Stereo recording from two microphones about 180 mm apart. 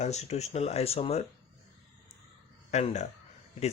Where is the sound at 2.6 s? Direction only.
40° left (ahead or behind).